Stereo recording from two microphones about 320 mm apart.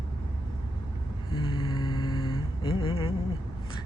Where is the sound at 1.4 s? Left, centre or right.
Centre.